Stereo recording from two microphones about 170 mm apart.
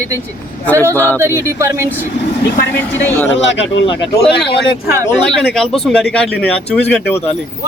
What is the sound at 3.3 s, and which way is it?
Speech, 90° left.